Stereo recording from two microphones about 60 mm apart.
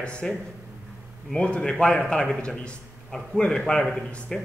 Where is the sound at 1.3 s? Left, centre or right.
Centre.